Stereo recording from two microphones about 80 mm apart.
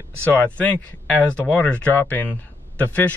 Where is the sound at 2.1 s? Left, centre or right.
Centre.